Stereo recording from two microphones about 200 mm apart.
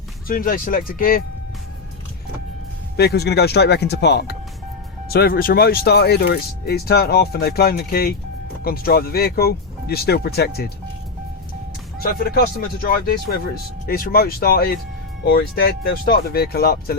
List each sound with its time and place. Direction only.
0.3 s speech: 45° left (ahead or behind)
2.9 s speech: 55° left (ahead or behind)
12.2 s speech: 50° left (ahead or behind)